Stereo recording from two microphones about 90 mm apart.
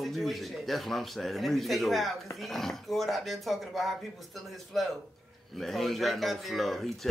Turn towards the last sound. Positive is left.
turn(degrees=0)  # may be behind; listen again after turning